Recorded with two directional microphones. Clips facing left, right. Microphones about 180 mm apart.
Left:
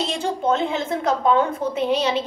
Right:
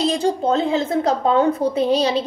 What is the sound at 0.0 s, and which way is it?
A woman's voice, 35° right (ahead or behind).